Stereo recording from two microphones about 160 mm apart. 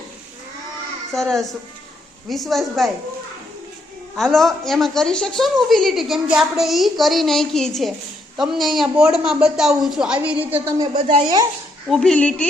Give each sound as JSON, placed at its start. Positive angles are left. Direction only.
{"t": 1.1, "sound": "a woman's voice", "side_deg": 5}
{"t": 4.2, "sound": "a woman's voice", "side_deg": 5}
{"t": 10.8, "sound": "speech", "side_deg": -35}
{"t": 11.9, "sound": "a woman's voice", "side_deg": 5}